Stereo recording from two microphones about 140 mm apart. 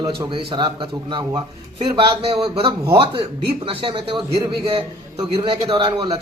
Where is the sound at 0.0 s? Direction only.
30° right (ahead or behind).